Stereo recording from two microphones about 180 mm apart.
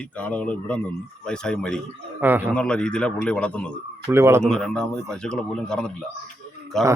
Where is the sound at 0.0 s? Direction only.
10° left (ahead or behind).